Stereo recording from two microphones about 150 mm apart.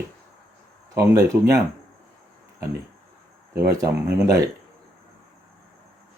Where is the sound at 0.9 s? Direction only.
20° right (ahead or behind).